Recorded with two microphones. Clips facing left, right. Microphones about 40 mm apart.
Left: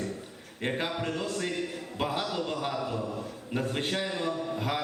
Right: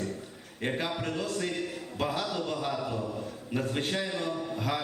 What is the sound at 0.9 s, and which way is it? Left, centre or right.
A man's voice, centre.